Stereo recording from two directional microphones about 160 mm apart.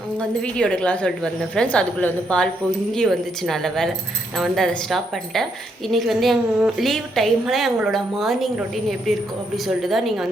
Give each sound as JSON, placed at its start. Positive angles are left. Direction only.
{"t": 0.2, "sound": "a woman's voice", "side_deg": 5}